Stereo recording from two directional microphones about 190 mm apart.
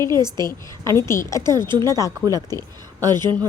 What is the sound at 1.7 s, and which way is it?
Speech, 20° right (ahead or behind).